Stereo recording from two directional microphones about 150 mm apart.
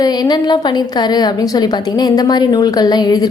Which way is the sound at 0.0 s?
25° left (ahead or behind).